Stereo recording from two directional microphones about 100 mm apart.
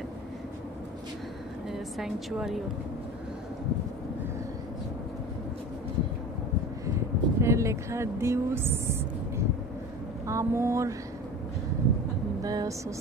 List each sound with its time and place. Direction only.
1.7 s a woman's voice: 5° right (ahead or behind)
6.9 s vehicle: 30° right (ahead or behind)
10.2 s speech: 30° right (ahead or behind)
12.4 s speech: 40° right (ahead or behind)